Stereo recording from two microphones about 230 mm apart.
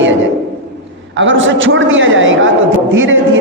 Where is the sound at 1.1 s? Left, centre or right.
Right.